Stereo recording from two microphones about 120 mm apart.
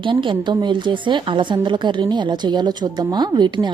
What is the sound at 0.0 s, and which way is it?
Speech, 45° right (ahead or behind).